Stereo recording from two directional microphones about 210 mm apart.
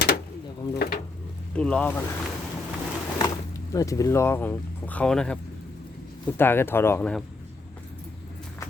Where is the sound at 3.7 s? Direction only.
15° left (ahead or behind).